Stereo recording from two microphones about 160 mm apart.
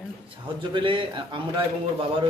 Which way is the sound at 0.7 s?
30° right (ahead or behind).